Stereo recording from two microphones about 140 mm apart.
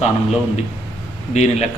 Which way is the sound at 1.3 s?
50° left (ahead or behind).